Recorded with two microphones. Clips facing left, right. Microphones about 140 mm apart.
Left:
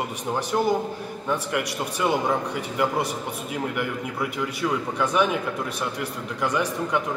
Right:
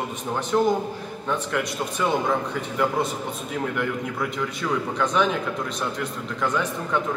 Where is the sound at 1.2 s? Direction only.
10° left (ahead or behind).